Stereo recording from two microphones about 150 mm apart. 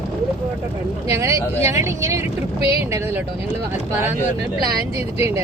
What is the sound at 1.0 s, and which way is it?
Speech, 20° right (ahead or behind).